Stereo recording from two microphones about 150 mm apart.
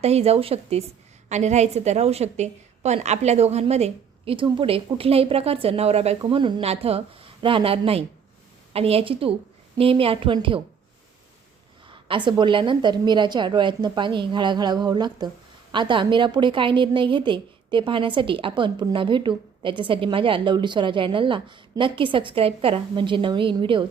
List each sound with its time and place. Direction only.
0.0 s a woman's voice: 45° right (ahead or behind)
11.9 s a woman's voice: 35° right (ahead or behind)